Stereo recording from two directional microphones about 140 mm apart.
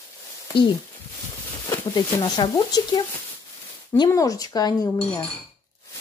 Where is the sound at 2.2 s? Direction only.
30° left (ahead or behind).